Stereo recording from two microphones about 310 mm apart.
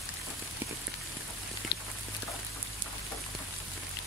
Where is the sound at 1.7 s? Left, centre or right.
Left.